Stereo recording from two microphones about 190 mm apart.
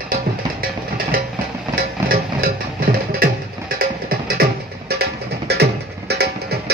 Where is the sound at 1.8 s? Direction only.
50° right (ahead or behind).